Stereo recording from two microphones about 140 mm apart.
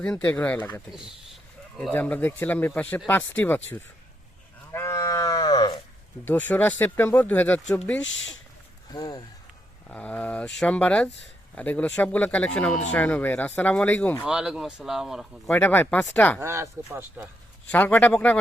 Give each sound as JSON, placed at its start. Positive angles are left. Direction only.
{"t": 0.2, "sound": "speech", "side_deg": 10}
{"t": 0.9, "sound": "speech", "side_deg": -5}
{"t": 1.8, "sound": "speech", "side_deg": 10}
{"t": 4.7, "sound": "livestock", "side_deg": 20}
{"t": 6.2, "sound": "speech", "side_deg": 10}
{"t": 8.9, "sound": "speech", "side_deg": 25}
{"t": 9.9, "sound": "speech", "side_deg": 10}
{"t": 14.3, "sound": "speech", "side_deg": -5}
{"t": 15.5, "sound": "speech", "side_deg": 15}
{"t": 16.4, "sound": "speech", "side_deg": -20}
{"t": 17.7, "sound": "speech", "side_deg": 10}